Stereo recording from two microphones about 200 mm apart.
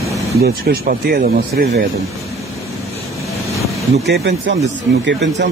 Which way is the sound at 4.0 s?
60° right (ahead or behind).